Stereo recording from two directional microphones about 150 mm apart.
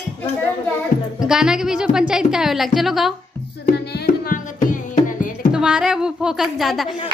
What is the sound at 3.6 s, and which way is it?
Music, 80° left.